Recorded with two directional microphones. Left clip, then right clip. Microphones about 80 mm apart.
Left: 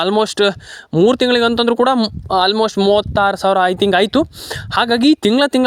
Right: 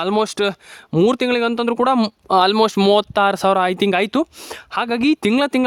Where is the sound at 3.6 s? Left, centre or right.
Centre.